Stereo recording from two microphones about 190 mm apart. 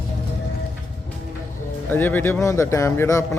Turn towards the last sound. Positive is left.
turn(degrees=15)  # may be behind; listen again after turning